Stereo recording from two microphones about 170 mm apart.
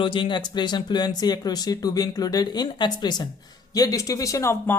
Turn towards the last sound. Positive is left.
turn(degrees=15)  # may be behind; listen again after turning